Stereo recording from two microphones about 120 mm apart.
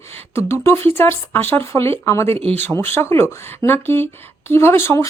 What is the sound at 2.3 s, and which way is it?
Speech, 55° right (ahead or behind).